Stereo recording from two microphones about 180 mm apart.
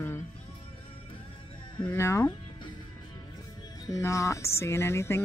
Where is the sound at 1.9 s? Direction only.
15° left (ahead or behind).